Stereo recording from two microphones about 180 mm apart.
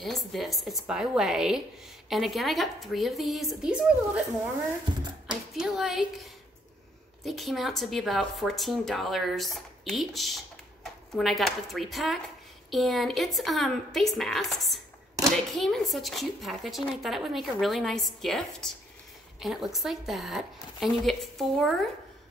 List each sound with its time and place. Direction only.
0.0 s a woman's voice: centre (ahead or behind)
5.3 s a woman's voice: centre (ahead or behind)
7.2 s a woman's voice: centre (ahead or behind)